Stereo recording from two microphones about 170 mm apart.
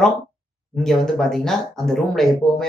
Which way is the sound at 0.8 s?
Centre (ahead or behind).